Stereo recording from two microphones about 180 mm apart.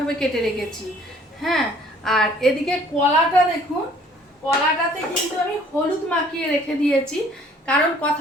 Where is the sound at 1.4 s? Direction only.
Centre (ahead or behind).